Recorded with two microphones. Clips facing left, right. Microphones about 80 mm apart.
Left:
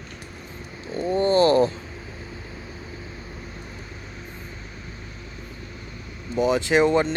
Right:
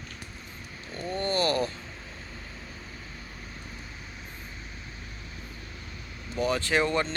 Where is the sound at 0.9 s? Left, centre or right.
Left.